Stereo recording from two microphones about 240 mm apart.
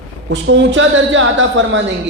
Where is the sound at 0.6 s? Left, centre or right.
Right.